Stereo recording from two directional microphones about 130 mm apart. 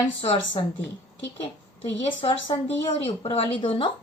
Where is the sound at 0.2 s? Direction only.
45° left (ahead or behind).